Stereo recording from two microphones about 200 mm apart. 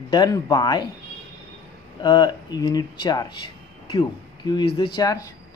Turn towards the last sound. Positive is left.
turn(degrees=20)  # may be behind; listen again after turning